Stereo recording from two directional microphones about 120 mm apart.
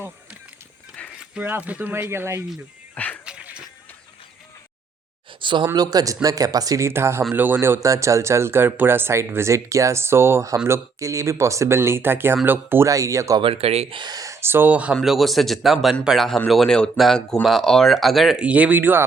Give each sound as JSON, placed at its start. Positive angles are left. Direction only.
{"t": 1.2, "sound": "speech", "side_deg": -15}
{"t": 2.9, "sound": "dog", "side_deg": 15}
{"t": 3.2, "sound": "a sound", "side_deg": -10}
{"t": 5.4, "sound": "a sound", "side_deg": -40}
{"t": 5.7, "sound": "a man's voice", "side_deg": -30}
{"t": 13.4, "sound": "speech", "side_deg": -55}
{"t": 14.0, "sound": "speech", "side_deg": -30}
{"t": 14.9, "sound": "speech", "side_deg": 0}